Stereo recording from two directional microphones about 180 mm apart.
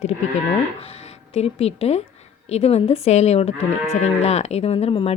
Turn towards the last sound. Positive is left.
turn(degrees=30)  # may be behind; listen again after turning